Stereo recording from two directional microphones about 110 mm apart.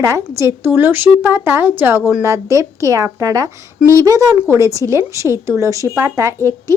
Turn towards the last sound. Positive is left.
turn(degrees=-30)  # may be behind; listen again after turning